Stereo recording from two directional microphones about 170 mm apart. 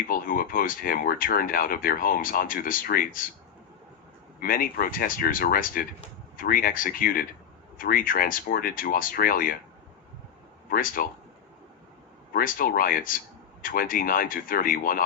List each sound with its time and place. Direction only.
0.1 s speech: 55° left (ahead or behind)
4.4 s speech: 55° left (ahead or behind)
10.7 s speech: 55° left (ahead or behind)
12.3 s speech: 55° left (ahead or behind)